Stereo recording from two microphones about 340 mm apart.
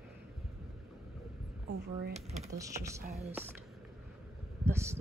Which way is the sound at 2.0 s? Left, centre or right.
Centre.